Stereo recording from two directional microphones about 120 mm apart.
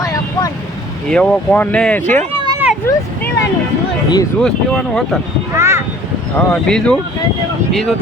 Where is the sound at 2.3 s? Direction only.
45° right (ahead or behind).